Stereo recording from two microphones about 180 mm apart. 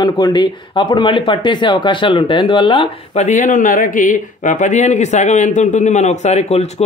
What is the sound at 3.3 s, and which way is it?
A man's voice, 45° left (ahead or behind).